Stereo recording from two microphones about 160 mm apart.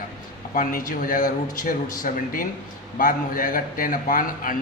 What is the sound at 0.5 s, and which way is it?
A man's voice, 60° left (ahead or behind).